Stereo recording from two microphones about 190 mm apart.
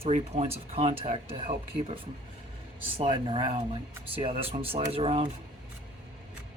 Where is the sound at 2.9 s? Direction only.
30° right (ahead or behind).